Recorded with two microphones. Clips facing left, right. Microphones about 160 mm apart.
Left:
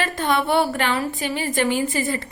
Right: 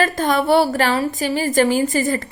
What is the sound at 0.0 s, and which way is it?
A woman's voice, 40° right (ahead or behind).